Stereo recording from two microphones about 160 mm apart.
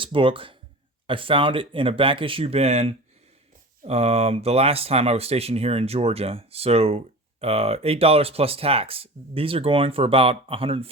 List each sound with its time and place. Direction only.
0.0 s speech: 35° right (ahead or behind)